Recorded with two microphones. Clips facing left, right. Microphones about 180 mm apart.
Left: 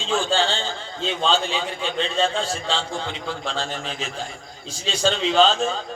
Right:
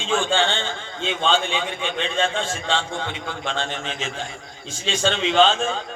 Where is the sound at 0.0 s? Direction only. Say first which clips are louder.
Right 1 dB; 35° left (ahead or behind).